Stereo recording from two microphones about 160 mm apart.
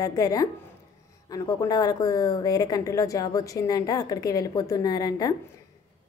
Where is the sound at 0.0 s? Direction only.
20° left (ahead or behind).